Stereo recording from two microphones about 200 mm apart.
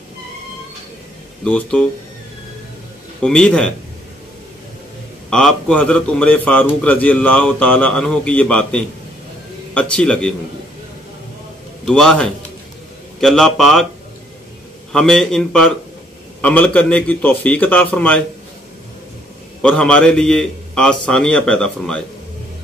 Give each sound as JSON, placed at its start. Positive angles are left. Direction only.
{"t": 1.4, "sound": "a man's voice", "side_deg": 5}
{"t": 3.2, "sound": "a man's voice", "side_deg": 5}
{"t": 5.3, "sound": "a man's voice", "side_deg": 5}
{"t": 11.8, "sound": "a man's voice", "side_deg": 5}
{"t": 14.9, "sound": "a man's voice", "side_deg": 0}
{"t": 19.6, "sound": "a man's voice", "side_deg": 5}